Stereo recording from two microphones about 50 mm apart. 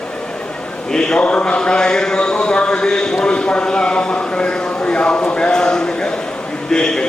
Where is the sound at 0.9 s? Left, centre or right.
Centre.